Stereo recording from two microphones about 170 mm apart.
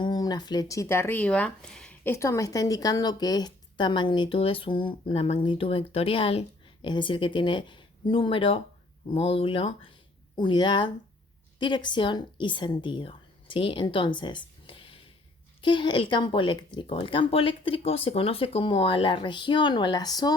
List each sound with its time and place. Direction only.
0.0 s speech: 25° left (ahead or behind)
14.2 s a sound: 25° left (ahead or behind)
15.6 s speech: 30° left (ahead or behind)